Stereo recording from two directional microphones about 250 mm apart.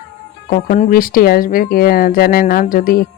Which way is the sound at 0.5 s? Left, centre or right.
Left.